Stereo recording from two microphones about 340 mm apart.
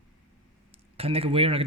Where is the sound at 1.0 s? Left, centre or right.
Centre.